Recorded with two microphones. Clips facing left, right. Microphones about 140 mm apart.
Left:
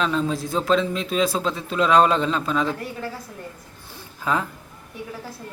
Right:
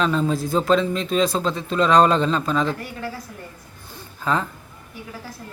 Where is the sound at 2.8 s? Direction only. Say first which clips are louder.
Even; 30° left (ahead or behind).